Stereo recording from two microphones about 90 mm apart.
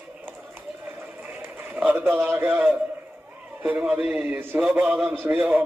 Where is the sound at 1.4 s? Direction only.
20° right (ahead or behind).